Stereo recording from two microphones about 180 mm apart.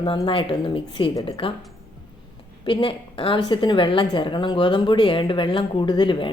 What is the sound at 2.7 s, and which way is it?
A woman's voice, 30° left (ahead or behind).